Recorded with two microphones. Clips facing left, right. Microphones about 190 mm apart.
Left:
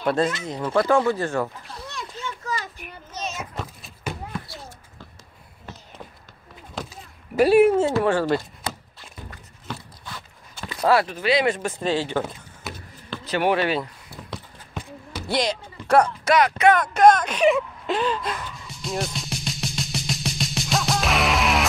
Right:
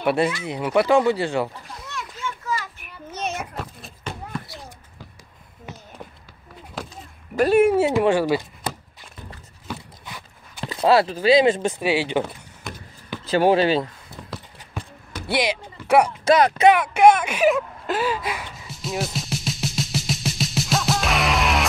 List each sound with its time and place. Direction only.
0.0 s speech: 10° right (ahead or behind)
1.8 s children playing: 35° left (ahead or behind)
3.1 s a sound: 60° right (ahead or behind)
4.1 s basketball bounce: 10° left (ahead or behind)
6.9 s a sound: 5° left (ahead or behind)
7.7 s speech: 15° right (ahead or behind)
9.7 s boat: 15° right (ahead or behind)
10.6 s speech: 25° right (ahead or behind)
11.8 s speech: 10° right (ahead or behind)
12.7 s basketball bounce: 5° left (ahead or behind)
13.3 s speech: 30° right (ahead or behind)
15.1 s a sound: 5° right (ahead or behind)
16.3 s speech: 30° right (ahead or behind)
16.7 s a sound: 10° right (ahead or behind)